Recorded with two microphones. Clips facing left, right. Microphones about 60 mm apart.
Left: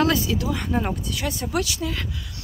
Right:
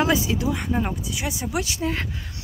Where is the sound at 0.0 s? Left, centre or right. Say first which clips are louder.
Even; centre.